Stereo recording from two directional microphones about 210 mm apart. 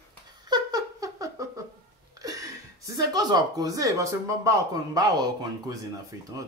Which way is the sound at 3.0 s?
20° right (ahead or behind).